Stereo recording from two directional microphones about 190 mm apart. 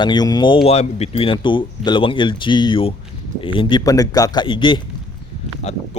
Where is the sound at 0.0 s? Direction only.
20° left (ahead or behind).